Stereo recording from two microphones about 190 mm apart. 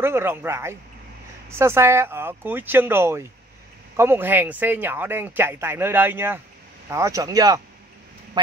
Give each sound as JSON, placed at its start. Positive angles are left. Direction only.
{"t": 0.0, "sound": "speech", "side_deg": -10}